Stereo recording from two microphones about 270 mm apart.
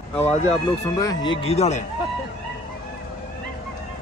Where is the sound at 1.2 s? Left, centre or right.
Left.